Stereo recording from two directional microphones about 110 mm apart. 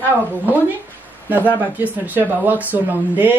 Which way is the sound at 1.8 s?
15° right (ahead or behind).